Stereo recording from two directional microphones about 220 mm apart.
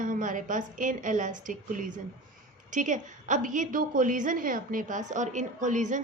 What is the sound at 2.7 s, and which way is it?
A woman's voice, 35° right (ahead or behind).